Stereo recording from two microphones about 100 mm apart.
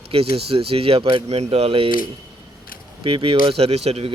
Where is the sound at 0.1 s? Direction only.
75° right (ahead or behind).